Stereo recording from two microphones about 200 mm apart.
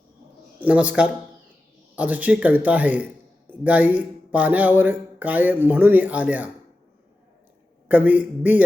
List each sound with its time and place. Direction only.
0.6 s speech: 5° right (ahead or behind)
7.9 s speech: 10° right (ahead or behind)